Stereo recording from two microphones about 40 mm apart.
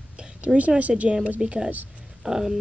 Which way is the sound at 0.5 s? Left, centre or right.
Right.